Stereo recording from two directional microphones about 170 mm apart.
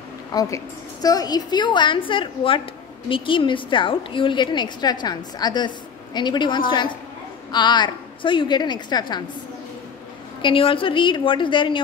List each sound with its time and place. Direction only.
0.3 s a woman's voice: 20° left (ahead or behind)
10.4 s a woman's voice: 30° left (ahead or behind)